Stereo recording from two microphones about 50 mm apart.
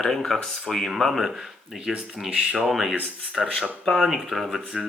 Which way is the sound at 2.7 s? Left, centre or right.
Centre.